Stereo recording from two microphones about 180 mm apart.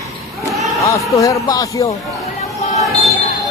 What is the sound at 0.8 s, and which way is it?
A man's voice, 15° left (ahead or behind).